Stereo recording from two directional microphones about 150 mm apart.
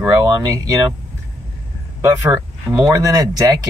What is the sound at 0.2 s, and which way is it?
Speech, 25° right (ahead or behind).